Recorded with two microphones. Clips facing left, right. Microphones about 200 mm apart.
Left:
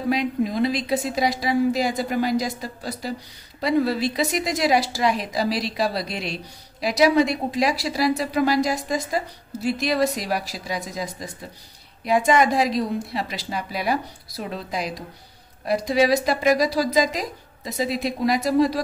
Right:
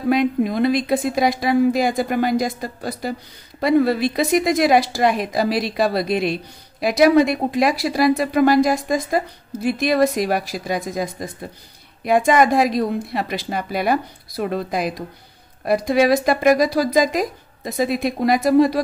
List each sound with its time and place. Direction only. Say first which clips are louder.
0.1 s a woman's voice: right 5 dB; 55° right (ahead or behind)